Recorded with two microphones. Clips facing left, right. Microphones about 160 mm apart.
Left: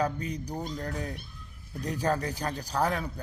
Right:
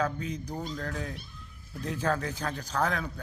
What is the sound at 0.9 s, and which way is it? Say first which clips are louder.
Speech: left 1 dB; 30° left (ahead or behind).